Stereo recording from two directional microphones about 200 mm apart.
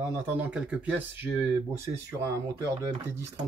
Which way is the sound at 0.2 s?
10° right (ahead or behind).